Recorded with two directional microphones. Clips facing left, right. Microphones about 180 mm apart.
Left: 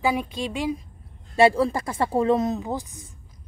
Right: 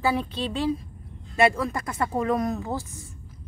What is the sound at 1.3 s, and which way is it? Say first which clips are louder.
A woman's voice: left 4 dB; 30° left (ahead or behind).